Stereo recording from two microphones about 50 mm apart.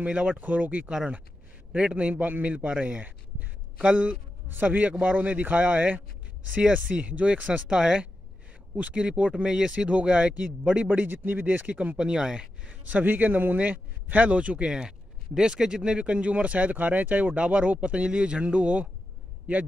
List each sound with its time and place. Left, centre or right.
0.0 s speech: right
0.4 s a man's voice: right
0.8 s speech: centre
2.0 s a man's voice: right
2.5 s a man's voice: right
7.6 s speech: centre; by 12.0 s right
12.0 s speech: centre
12.8 s a man's voice: right
14.7 s speech: centre